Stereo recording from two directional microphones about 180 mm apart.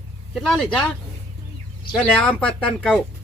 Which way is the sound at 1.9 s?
5° left (ahead or behind).